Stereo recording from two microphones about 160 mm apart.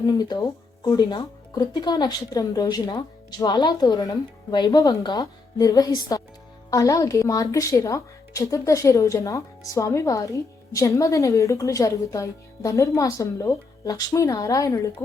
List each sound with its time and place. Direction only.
0.0 s speech: 25° left (ahead or behind)